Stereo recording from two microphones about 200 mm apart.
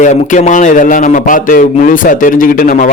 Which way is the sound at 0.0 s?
40° left (ahead or behind).